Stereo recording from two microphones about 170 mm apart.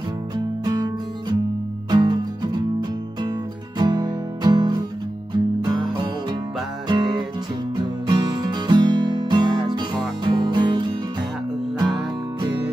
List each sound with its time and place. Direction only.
0.7 s music: 25° right (ahead or behind)